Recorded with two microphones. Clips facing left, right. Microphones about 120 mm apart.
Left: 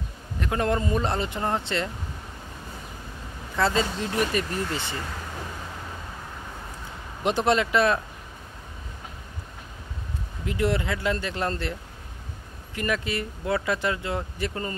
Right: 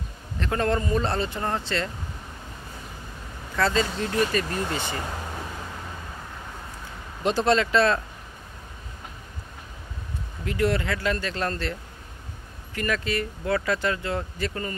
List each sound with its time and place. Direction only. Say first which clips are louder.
0.4 s speech: even; 15° left (ahead or behind)
3.5 s speech: even; 20° left (ahead or behind)
4.5 s speech: right 1 dB; 20° right (ahead or behind)
7.2 s speech: right 1 dB; 20° left (ahead or behind)
10.4 s speech: right 1 dB; 20° left (ahead or behind)
12.7 s speech: right 1 dB; 20° left (ahead or behind)